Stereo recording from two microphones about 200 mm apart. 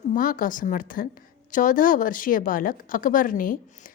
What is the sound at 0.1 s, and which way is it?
A woman's voice, 45° left (ahead or behind).